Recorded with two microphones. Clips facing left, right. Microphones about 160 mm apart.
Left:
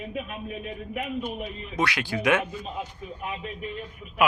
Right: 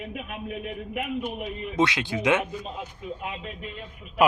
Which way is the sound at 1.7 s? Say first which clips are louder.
Right 3 dB; 20° right (ahead or behind).